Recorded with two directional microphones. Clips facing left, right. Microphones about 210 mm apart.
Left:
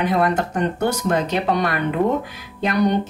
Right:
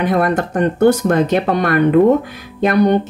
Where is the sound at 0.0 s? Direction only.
50° right (ahead or behind).